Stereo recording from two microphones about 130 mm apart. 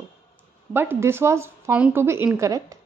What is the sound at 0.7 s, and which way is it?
Speech, 15° right (ahead or behind).